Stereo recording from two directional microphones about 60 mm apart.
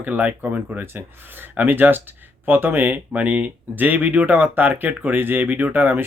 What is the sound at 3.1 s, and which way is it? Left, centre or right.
Speech, right.